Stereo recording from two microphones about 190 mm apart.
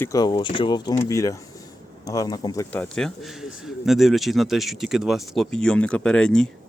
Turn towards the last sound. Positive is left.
turn(degrees=5)  # may be behind; listen again after turning